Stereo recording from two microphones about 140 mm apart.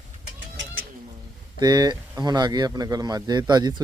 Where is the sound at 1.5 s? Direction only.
30° right (ahead or behind).